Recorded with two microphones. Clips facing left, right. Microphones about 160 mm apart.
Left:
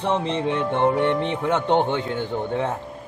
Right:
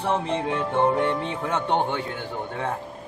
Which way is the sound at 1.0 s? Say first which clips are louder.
Left 3 dB; 20° left (ahead or behind).